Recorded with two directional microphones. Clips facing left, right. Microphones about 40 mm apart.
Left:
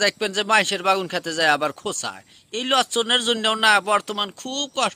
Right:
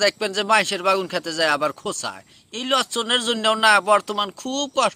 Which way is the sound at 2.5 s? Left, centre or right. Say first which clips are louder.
Left 1 dB; left.